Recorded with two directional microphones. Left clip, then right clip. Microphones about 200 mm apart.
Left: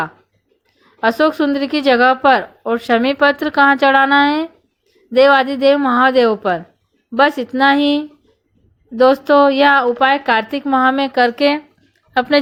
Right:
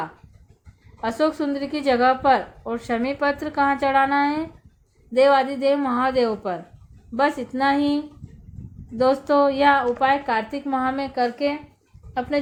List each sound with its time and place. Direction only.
1.0 s speech: 25° left (ahead or behind)